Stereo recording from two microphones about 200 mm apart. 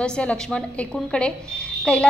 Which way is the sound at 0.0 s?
5° left (ahead or behind).